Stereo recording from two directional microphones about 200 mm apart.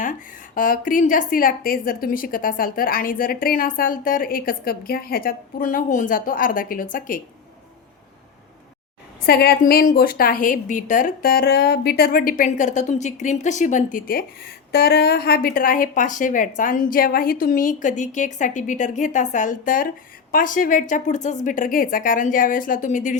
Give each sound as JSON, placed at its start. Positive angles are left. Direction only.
{"t": 0.0, "sound": "a woman's voice", "side_deg": 40}
{"t": 9.2, "sound": "a woman's voice", "side_deg": 50}